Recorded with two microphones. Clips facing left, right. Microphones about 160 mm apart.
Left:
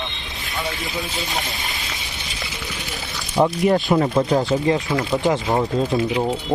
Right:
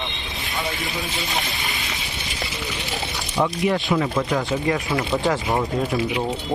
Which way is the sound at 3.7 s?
35° left (ahead or behind).